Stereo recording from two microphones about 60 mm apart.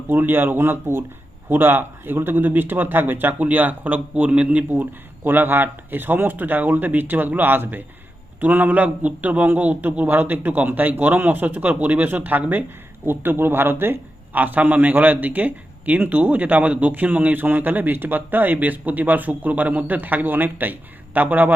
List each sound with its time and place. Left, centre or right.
0.1 s a man's voice: right